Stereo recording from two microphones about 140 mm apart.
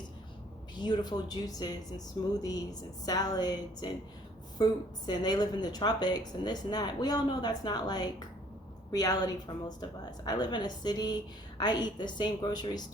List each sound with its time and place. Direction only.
0.8 s a woman's voice: 30° left (ahead or behind)